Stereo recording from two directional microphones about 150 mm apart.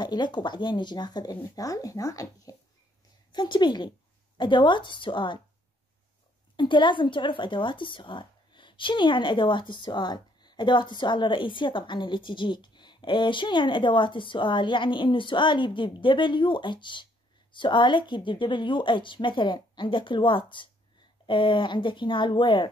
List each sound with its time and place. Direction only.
0.0 s speech: 30° left (ahead or behind)
6.5 s speech: 30° left (ahead or behind)